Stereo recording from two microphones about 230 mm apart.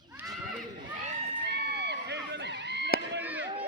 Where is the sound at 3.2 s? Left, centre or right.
Centre.